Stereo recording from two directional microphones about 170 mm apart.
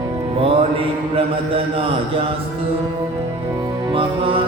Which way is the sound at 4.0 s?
30° right (ahead or behind).